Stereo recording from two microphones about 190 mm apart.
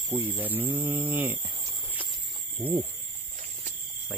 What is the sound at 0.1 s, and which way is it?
Speech, 10° right (ahead or behind).